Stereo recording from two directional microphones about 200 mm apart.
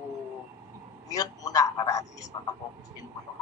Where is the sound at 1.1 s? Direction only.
20° left (ahead or behind).